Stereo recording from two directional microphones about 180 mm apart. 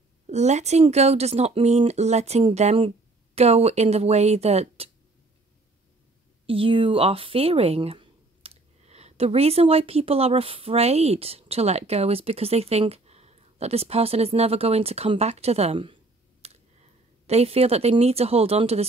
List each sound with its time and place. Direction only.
0.3 s speech: 40° right (ahead or behind)
6.4 s speech: 30° right (ahead or behind)
16.4 s a sound: 35° right (ahead or behind)
17.3 s speech: 35° right (ahead or behind)